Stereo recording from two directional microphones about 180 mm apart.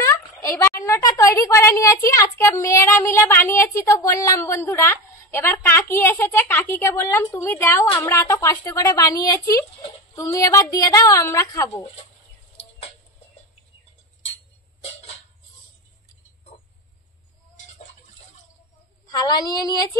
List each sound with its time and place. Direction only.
0.1 s a woman's voice: 15° left (ahead or behind)
19.0 s speech: 20° left (ahead or behind)